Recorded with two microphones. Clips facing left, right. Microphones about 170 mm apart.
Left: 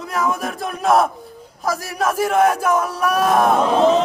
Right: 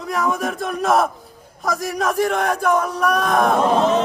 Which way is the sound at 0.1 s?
Centre (ahead or behind).